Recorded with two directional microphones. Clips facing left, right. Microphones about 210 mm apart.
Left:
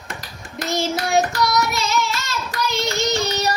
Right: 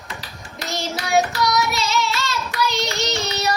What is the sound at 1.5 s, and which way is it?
Singing, centre (ahead or behind).